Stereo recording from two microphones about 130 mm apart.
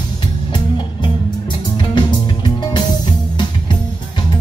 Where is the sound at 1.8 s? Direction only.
35° left (ahead or behind).